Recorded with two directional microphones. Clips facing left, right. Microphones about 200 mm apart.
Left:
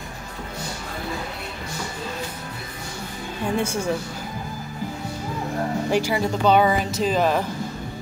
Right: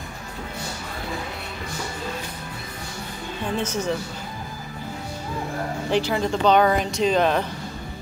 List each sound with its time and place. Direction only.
3.5 s speech: 10° left (ahead or behind)
5.9 s speech: 10° left (ahead or behind)